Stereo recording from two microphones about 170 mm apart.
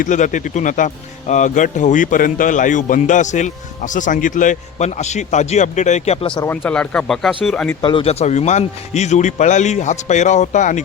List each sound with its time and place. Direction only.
0.0 s a man's voice: 50° left (ahead or behind)
6.4 s speech: 10° left (ahead or behind)
7.8 s a man's voice: 30° left (ahead or behind); by 10.8 s 45° left (ahead or behind)